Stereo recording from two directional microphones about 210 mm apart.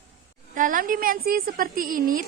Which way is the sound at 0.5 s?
40° right (ahead or behind).